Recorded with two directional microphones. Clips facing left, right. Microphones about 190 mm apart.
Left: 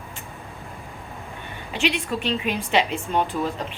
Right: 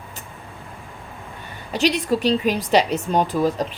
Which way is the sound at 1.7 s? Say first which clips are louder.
Right 5 dB; 40° right (ahead or behind).